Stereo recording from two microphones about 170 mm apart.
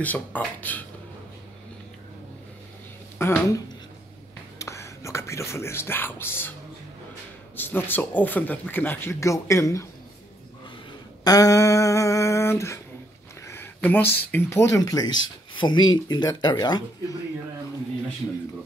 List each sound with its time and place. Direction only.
0.0 s speech: 10° left (ahead or behind)
3.2 s speech: 15° left (ahead or behind)
7.5 s speech: 10° left (ahead or behind)
11.2 s a sound: 20° left (ahead or behind)
13.7 s speech: 10° left (ahead or behind)